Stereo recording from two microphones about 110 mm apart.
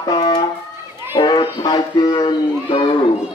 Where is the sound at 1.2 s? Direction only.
40° left (ahead or behind).